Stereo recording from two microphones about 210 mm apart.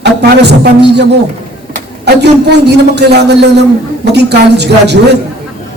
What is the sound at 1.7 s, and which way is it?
A man's voice, 50° right (ahead or behind).